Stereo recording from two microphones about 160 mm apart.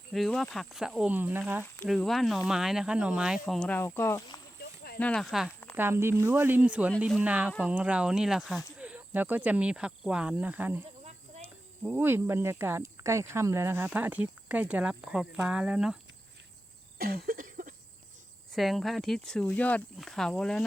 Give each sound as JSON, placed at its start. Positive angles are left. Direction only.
{"t": 0.1, "sound": "speech", "side_deg": 0}
{"t": 1.6, "sound": "speech", "side_deg": 10}
{"t": 1.9, "sound": "speech", "side_deg": 0}
{"t": 4.6, "sound": "a sound", "side_deg": 90}
{"t": 4.9, "sound": "speech", "side_deg": 5}
{"t": 5.7, "sound": "speech", "side_deg": -15}
{"t": 17.0, "sound": "a sound", "side_deg": -70}
{"t": 18.5, "sound": "speech", "side_deg": 0}